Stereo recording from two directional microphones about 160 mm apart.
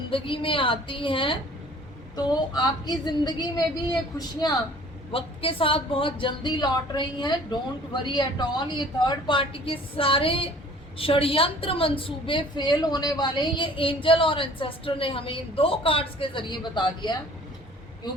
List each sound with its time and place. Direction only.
0.1 s a woman's voice: 35° left (ahead or behind)